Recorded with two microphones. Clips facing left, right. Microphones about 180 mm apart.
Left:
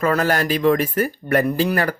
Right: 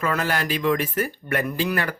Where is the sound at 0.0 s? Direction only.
40° left (ahead or behind).